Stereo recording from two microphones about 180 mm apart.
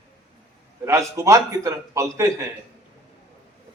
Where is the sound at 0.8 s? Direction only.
15° right (ahead or behind).